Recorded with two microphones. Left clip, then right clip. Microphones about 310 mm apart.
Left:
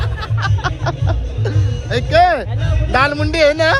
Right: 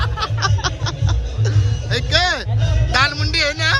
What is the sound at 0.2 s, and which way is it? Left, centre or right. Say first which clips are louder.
Music: right 2 dB; right.